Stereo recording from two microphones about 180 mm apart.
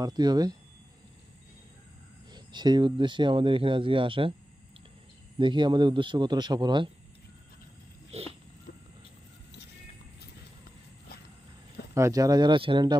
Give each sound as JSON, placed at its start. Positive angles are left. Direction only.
{"t": 0.0, "sound": "speech", "side_deg": -25}
{"t": 2.3, "sound": "speech", "side_deg": -25}
{"t": 5.4, "sound": "speech", "side_deg": -25}
{"t": 8.1, "sound": "speech", "side_deg": -35}
{"t": 11.9, "sound": "speech", "side_deg": -20}